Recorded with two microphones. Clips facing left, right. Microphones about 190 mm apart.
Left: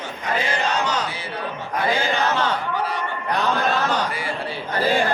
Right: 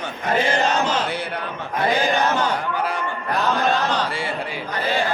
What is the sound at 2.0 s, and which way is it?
Speech, 15° right (ahead or behind).